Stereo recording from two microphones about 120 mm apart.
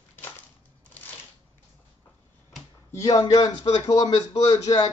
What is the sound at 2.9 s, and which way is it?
Speech, 25° left (ahead or behind).